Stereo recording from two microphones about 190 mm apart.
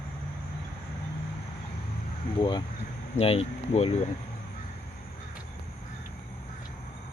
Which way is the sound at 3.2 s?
35° left (ahead or behind).